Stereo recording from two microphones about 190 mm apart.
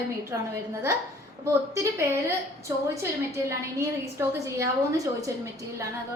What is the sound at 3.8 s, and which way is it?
Speech, 15° right (ahead or behind).